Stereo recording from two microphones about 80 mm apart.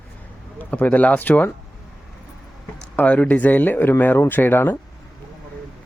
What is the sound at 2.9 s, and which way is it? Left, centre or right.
Speech, centre.